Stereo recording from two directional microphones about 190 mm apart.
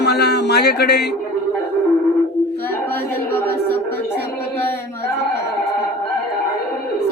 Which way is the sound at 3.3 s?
10° left (ahead or behind).